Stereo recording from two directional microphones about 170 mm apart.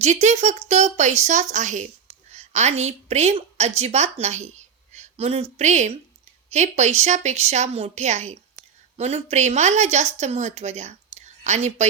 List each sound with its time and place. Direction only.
0.0 s a woman's voice: 45° right (ahead or behind)